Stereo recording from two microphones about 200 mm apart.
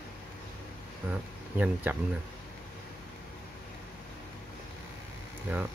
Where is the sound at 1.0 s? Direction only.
10° right (ahead or behind).